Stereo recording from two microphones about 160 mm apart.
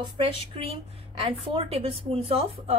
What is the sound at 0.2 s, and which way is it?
A woman's voice, 35° right (ahead or behind).